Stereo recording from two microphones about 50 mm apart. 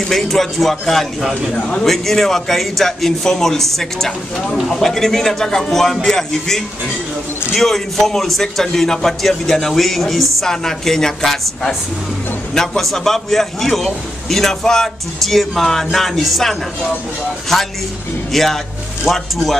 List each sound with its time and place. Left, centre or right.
0.1 s a man's voice: centre
1.5 s a man's voice: centre
1.9 s a man's voice: centre